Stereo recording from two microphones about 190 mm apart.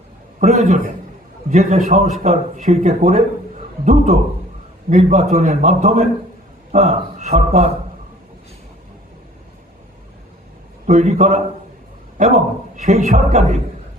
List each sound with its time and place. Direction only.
0.3 s a man's voice: 40° right (ahead or behind)
10.8 s a man's voice: 40° right (ahead or behind)